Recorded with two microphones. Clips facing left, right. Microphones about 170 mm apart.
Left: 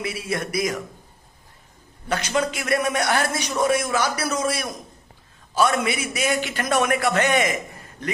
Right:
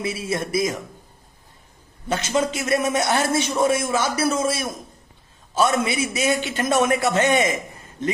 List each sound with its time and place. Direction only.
0.0 s a man's voice: 25° right (ahead or behind)
2.0 s a man's voice: 25° right (ahead or behind)